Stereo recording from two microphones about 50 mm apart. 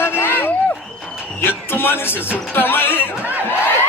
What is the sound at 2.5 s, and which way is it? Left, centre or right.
Speech, left.